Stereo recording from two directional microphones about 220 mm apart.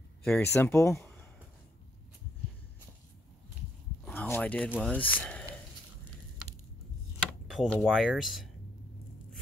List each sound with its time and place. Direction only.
0.2 s speech: 5° left (ahead or behind)
4.0 s a sound: 5° left (ahead or behind)
4.6 s speech: 5° right (ahead or behind)
4.9 s speech: 5° left (ahead or behind)
7.4 s speech: centre (ahead or behind)